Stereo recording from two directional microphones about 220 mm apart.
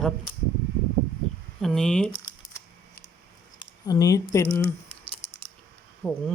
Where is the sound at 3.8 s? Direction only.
15° left (ahead or behind).